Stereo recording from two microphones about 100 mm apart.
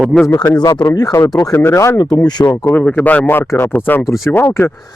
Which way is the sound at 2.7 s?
15° left (ahead or behind).